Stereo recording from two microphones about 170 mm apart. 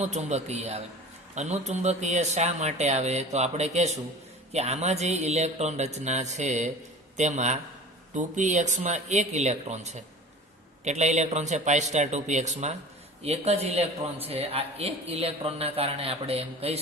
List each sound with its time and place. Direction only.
0.0 s a man's voice: 40° right (ahead or behind)